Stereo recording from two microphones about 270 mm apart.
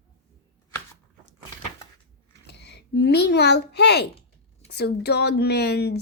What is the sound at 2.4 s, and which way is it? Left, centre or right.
A child's voice, left.